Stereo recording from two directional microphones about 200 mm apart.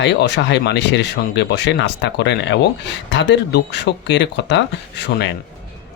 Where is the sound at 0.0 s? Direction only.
60° left (ahead or behind).